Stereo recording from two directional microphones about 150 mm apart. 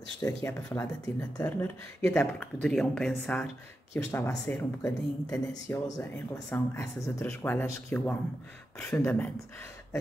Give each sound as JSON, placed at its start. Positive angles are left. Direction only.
{"t": 0.2, "sound": "speech", "side_deg": 15}
{"t": 2.0, "sound": "speech", "side_deg": 10}